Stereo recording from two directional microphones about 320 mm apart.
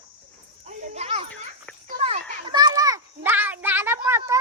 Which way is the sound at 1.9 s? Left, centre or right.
Centre.